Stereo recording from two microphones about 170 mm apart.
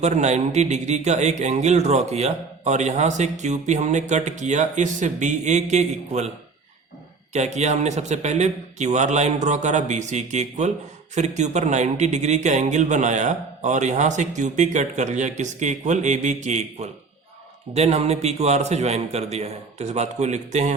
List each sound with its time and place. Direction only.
0.0 s a man's voice: 40° right (ahead or behind)
7.3 s a man's voice: 40° right (ahead or behind)